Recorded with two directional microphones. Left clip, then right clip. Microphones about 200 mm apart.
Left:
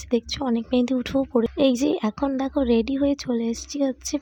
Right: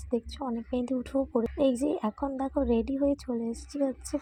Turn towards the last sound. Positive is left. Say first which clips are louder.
# left 5 dB
turn(degrees=20)  # may be behind; listen again after turning